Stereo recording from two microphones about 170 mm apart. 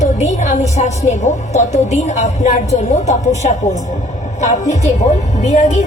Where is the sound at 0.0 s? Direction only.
40° left (ahead or behind).